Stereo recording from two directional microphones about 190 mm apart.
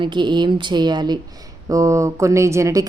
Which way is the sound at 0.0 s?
25° right (ahead or behind).